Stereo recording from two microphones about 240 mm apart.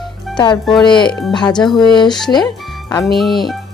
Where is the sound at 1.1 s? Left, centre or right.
Centre.